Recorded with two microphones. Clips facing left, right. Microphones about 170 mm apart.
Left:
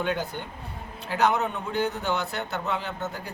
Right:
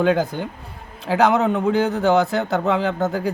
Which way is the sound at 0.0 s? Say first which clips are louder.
Right 10 dB; 90° right.